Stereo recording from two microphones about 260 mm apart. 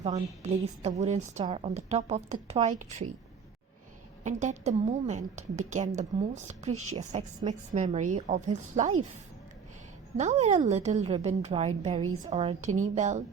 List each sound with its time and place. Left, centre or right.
0.0 s a woman's voice: right
4.2 s a woman's voice: right
10.2 s a woman's voice: right